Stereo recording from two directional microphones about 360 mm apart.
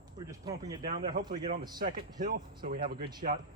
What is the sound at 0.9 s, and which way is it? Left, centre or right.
Speech, right.